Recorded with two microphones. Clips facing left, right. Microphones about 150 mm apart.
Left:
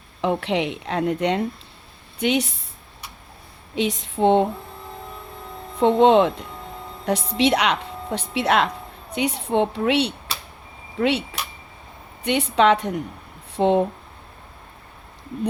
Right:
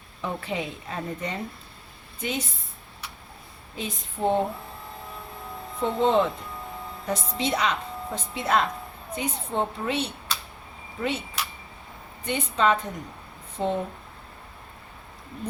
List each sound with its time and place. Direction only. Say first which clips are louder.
0.2 s a woman's voice: left 8 dB; 75° left (ahead or behind)
3.8 s a sound: left 9 dB; 90° left
5.8 s a woman's voice: left 7 dB; 75° left (ahead or behind)